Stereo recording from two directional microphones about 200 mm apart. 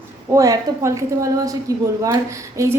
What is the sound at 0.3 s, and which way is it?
A woman's voice, 15° right (ahead or behind).